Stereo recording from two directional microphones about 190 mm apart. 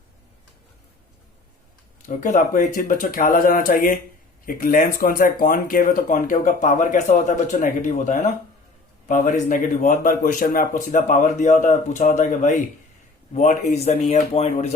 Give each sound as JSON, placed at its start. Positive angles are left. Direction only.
{"t": 2.0, "sound": "speech", "side_deg": 40}